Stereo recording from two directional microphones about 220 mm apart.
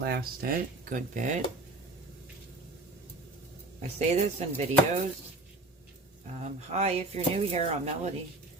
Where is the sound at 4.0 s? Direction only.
30° right (ahead or behind).